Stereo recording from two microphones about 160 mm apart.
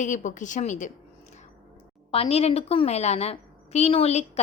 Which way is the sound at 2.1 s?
40° left (ahead or behind).